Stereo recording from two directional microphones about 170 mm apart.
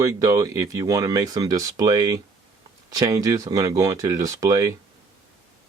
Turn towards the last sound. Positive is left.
turn(degrees=-20)  # may be behind; listen again after turning